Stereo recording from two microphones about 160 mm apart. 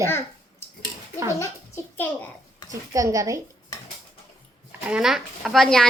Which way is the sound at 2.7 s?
20° right (ahead or behind).